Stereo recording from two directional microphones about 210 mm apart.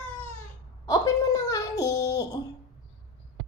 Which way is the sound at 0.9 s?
15° left (ahead or behind).